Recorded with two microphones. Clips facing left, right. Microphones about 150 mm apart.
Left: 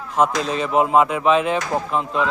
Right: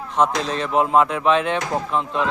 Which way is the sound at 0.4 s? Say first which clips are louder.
Left 1 dB; 5° left (ahead or behind).